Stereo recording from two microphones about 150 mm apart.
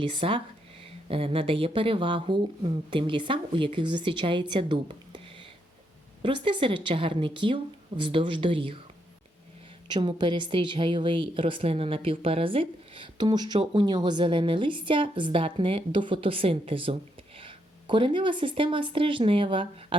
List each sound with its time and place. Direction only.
0.0 s a woman's voice: 35° right (ahead or behind)
6.2 s a woman's voice: 35° right (ahead or behind)
9.9 s a woman's voice: 30° right (ahead or behind)